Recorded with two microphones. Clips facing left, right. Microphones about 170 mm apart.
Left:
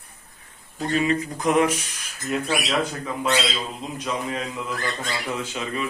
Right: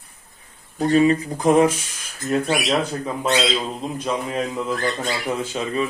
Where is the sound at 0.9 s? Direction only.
35° right (ahead or behind).